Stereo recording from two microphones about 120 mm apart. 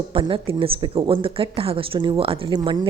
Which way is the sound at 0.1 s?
45° right (ahead or behind).